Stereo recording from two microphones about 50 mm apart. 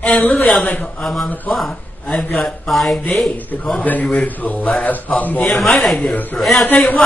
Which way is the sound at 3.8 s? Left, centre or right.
Left.